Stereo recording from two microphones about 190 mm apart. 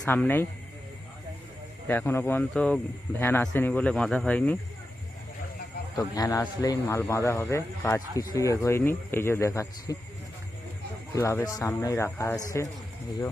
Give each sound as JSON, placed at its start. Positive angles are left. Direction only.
{"t": 0.0, "sound": "speech", "side_deg": 10}
{"t": 1.9, "sound": "speech", "side_deg": 10}
{"t": 6.0, "sound": "speech", "side_deg": 15}
{"t": 11.1, "sound": "speech", "side_deg": 15}